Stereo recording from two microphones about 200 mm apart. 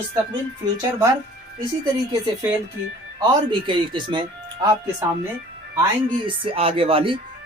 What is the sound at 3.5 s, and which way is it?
Speech, 25° right (ahead or behind).